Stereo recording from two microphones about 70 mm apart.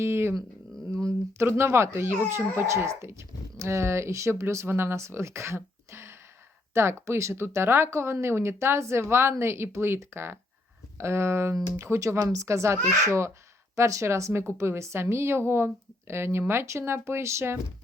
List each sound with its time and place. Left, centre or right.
0.0 s speech: right